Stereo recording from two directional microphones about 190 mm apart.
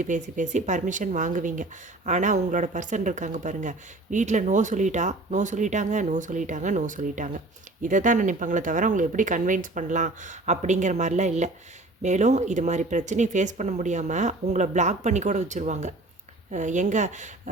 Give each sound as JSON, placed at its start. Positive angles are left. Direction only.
{"t": 0.0, "sound": "speech", "side_deg": -40}